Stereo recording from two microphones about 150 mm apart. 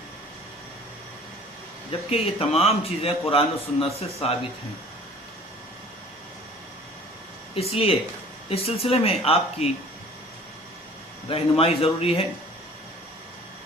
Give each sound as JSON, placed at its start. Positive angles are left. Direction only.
{"t": 1.9, "sound": "a man's voice", "side_deg": 40}
{"t": 7.5, "sound": "a man's voice", "side_deg": 40}
{"t": 11.3, "sound": "a man's voice", "side_deg": 40}